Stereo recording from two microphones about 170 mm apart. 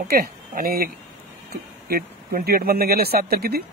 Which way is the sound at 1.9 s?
60° right (ahead or behind).